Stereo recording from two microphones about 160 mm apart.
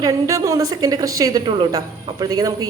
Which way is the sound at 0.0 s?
20° right (ahead or behind).